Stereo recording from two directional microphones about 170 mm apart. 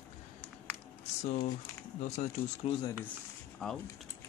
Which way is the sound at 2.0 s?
45° left (ahead or behind).